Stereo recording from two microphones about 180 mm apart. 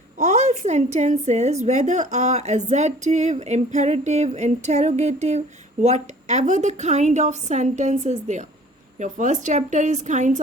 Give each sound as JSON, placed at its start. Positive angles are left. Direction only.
{"t": 0.2, "sound": "a woman's voice", "side_deg": -40}